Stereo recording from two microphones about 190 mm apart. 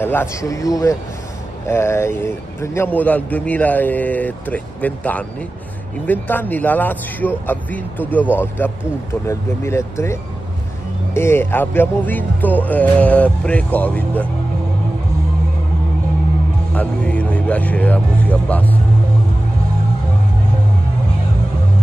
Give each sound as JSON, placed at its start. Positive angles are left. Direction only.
{"t": 0.0, "sound": "a man's voice", "side_deg": 10}
{"t": 11.1, "sound": "a man's voice", "side_deg": 15}
{"t": 16.7, "sound": "a man's voice", "side_deg": 5}